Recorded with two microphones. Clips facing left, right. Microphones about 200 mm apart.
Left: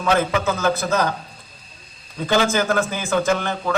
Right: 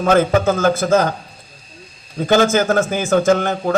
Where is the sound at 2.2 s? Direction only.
45° right (ahead or behind).